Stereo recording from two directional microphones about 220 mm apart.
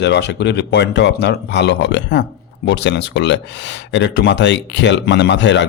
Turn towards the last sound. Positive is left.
turn(degrees=55)  # may be behind; listen again after turning